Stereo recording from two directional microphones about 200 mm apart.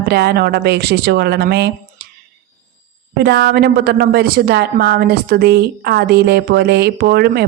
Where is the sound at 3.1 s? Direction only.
55° right (ahead or behind).